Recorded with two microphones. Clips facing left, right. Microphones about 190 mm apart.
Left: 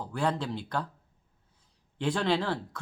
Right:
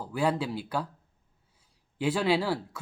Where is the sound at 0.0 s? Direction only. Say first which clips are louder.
Right 2 dB; 10° right (ahead or behind).